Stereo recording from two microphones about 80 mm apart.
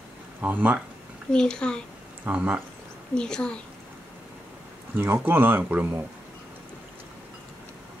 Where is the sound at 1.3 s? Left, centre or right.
Centre.